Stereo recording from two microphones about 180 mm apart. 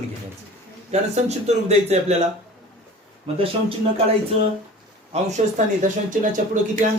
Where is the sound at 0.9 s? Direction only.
35° right (ahead or behind).